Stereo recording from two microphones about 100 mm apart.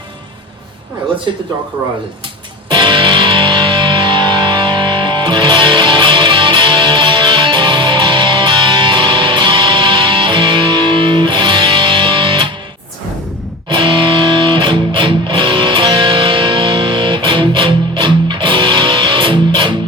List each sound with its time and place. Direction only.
2.6 s music: 50° right (ahead or behind)
13.7 s music: 55° right (ahead or behind)